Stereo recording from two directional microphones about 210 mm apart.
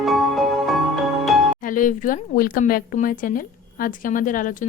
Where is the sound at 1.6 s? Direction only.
40° left (ahead or behind).